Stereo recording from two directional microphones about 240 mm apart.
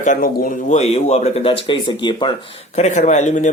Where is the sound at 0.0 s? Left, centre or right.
Left.